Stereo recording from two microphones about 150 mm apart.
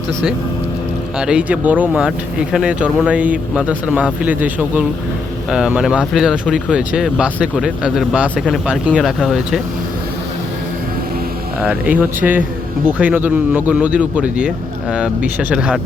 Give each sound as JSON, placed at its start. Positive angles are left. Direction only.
{"t": 1.2, "sound": "speech", "side_deg": -5}
{"t": 11.6, "sound": "speech", "side_deg": -10}